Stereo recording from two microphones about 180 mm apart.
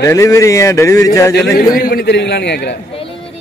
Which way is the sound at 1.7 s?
55° left (ahead or behind).